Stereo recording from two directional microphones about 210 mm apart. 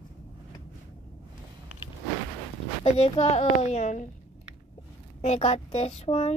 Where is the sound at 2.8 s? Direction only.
30° left (ahead or behind).